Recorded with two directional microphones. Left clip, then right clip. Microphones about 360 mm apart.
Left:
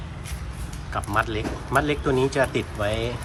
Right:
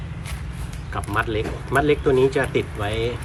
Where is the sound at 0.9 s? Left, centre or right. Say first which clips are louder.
Right 1 dB; centre.